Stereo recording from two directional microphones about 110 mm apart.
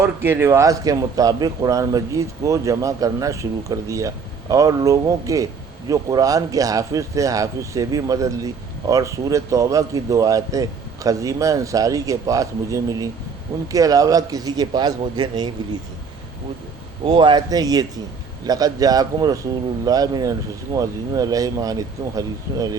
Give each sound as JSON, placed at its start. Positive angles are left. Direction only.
{"t": 0.0, "sound": "speech", "side_deg": -20}
{"t": 17.1, "sound": "speech", "side_deg": -40}